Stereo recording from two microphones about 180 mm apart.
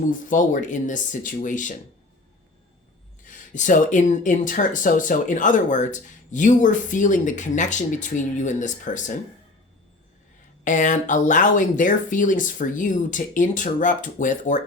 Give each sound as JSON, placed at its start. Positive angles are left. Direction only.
{"t": 0.1, "sound": "speech", "side_deg": 45}
{"t": 3.2, "sound": "speech", "side_deg": 45}
{"t": 10.6, "sound": "speech", "side_deg": 45}